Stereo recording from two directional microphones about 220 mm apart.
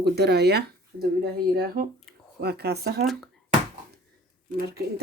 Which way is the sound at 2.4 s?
45° right (ahead or behind).